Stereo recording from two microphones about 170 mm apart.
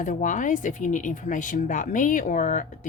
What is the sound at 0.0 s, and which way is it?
Speech, 50° left (ahead or behind).